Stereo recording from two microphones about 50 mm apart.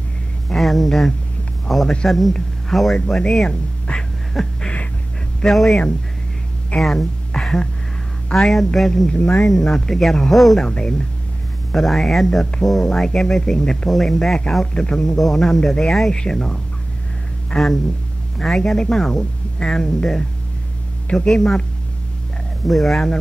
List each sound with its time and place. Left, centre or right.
0.6 s speech: centre
3.4 s speech: left
4.3 s a sound: centre
5.4 s speech: centre
6.8 s speech: centre
9.1 s speech: left
9.4 s speech: centre
10.6 s speech: centre
11.7 s speech: centre
21.3 s speech: centre
22.7 s speech: centre